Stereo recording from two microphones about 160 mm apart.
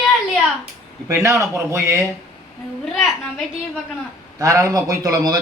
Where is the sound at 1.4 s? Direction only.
15° right (ahead or behind).